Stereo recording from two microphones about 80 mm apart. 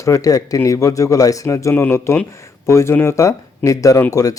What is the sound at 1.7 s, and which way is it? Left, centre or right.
Speech, left.